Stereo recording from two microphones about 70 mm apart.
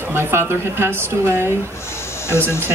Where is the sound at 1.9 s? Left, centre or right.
Left.